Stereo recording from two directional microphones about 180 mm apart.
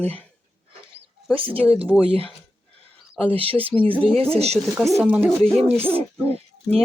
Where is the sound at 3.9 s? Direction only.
5° left (ahead or behind).